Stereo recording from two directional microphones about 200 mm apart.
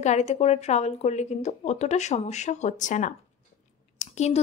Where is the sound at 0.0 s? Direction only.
35° left (ahead or behind).